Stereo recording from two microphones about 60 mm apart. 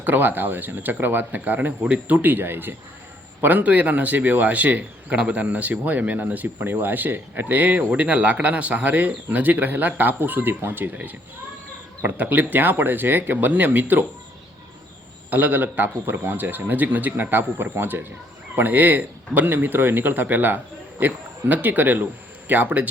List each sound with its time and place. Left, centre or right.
0.0 s a man's voice: right
15.3 s a man's voice: right